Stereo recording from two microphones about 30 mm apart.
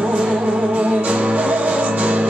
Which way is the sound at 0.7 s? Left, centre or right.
Right.